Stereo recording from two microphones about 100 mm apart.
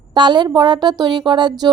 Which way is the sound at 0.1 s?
50° right (ahead or behind).